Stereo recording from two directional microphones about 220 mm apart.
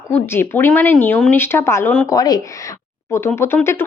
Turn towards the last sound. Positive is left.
turn(degrees=10)  # may be behind; listen again after turning